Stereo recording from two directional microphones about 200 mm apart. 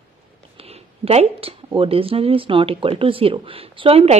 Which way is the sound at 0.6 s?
30° right (ahead or behind).